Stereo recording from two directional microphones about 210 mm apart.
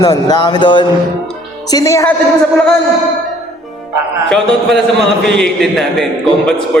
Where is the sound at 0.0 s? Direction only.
15° left (ahead or behind).